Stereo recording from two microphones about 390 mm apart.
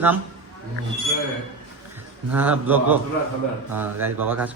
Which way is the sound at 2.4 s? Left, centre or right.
Centre.